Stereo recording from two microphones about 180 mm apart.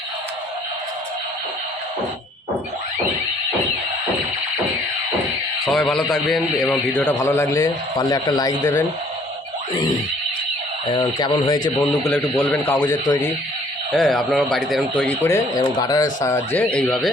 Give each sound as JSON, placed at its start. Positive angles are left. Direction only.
{"t": 5.6, "sound": "a man's voice", "side_deg": 0}
{"t": 10.9, "sound": "speech", "side_deg": 30}
{"t": 12.0, "sound": "speech", "side_deg": 10}
{"t": 12.8, "sound": "speech", "side_deg": 20}
{"t": 13.9, "sound": "a man's voice", "side_deg": 0}